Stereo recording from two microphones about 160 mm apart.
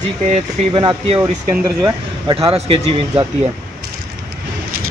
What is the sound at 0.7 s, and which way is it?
Speech, 30° right (ahead or behind).